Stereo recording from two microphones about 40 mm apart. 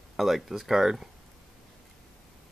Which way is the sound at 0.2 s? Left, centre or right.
Centre.